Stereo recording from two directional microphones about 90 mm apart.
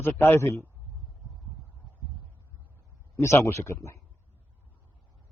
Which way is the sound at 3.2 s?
35° left (ahead or behind).